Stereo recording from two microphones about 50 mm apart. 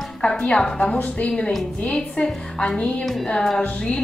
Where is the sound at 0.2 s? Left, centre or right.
Centre.